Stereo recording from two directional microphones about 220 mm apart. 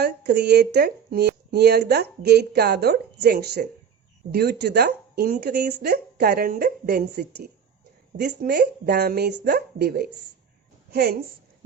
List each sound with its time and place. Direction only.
0.0 s speech: 45° right (ahead or behind)